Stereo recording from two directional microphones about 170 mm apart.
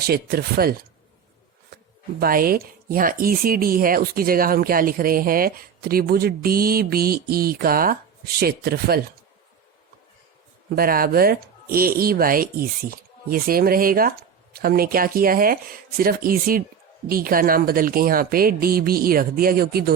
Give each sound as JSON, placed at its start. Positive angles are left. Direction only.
{"t": 0.0, "sound": "speech", "side_deg": -65}
{"t": 10.8, "sound": "speech", "side_deg": -60}